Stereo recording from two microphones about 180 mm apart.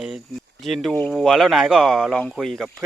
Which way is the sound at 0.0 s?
Centre (ahead or behind).